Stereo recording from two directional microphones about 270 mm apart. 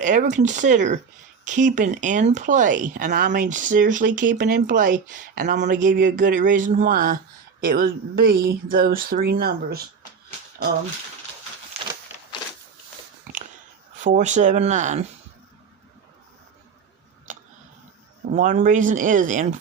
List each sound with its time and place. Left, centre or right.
0.0 s speech: right
14.0 s speech: right
17.3 s a sound: right
18.3 s speech: right